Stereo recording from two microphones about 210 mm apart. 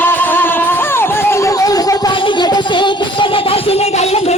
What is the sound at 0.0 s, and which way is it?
Music, 10° left (ahead or behind).